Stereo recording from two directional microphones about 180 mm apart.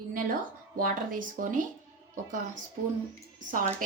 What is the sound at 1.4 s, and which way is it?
Speech, 45° right (ahead or behind).